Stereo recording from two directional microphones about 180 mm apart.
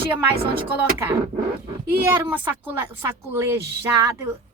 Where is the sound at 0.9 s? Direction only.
15° right (ahead or behind).